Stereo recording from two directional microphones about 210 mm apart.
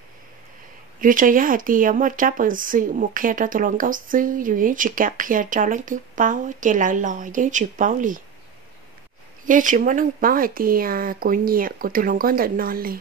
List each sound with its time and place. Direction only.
1.0 s speech: 40° right (ahead or behind)
9.5 s speech: 40° right (ahead or behind)